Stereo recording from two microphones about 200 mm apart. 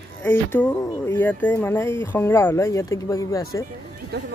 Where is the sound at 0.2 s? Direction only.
10° left (ahead or behind).